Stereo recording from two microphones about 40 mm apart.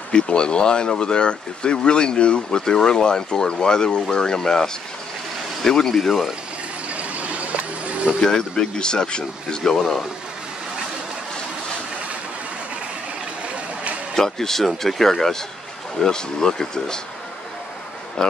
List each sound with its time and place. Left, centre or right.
0.1 s speech: left; by 6.3 s centre
7.0 s a sound: right
8.2 s speech: centre
14.1 s speech: centre